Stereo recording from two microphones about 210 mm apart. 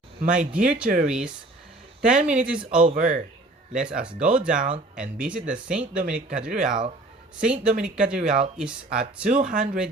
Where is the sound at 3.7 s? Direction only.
5° right (ahead or behind).